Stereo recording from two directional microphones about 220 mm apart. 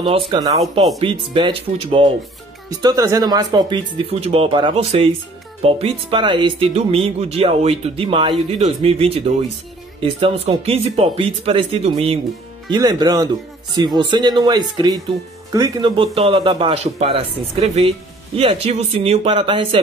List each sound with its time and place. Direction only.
0.3 s speech: 15° right (ahead or behind)